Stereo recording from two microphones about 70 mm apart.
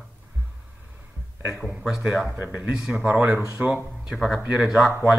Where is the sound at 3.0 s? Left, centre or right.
Right.